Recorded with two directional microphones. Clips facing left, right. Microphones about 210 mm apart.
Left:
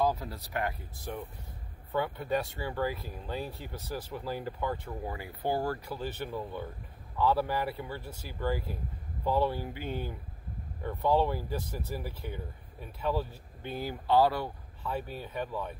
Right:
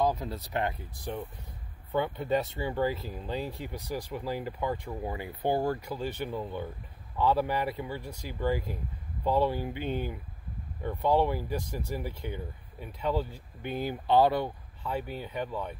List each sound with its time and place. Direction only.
0.1 s speech: 20° right (ahead or behind)